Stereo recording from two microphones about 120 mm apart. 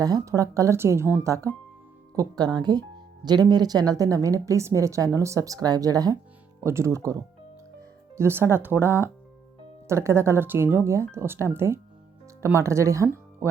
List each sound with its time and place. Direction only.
0.0 s speech: 30° right (ahead or behind)